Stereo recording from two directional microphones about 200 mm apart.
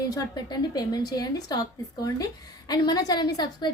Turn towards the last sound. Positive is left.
turn(degrees=20)  # may be behind; listen again after turning